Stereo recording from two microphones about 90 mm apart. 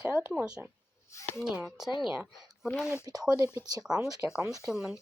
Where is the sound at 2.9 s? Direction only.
45° right (ahead or behind).